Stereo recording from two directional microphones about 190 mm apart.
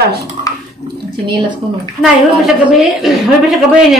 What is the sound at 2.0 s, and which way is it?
A woman's voice, centre (ahead or behind).